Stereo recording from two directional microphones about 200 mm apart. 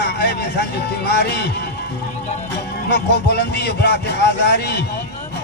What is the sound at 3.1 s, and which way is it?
Speech, 55° left (ahead or behind).